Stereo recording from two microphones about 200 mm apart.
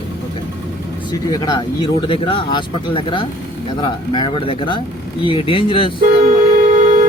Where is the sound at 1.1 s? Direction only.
20° left (ahead or behind).